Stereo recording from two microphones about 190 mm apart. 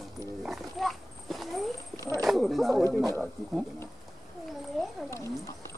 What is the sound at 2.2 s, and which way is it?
Speech, centre (ahead or behind).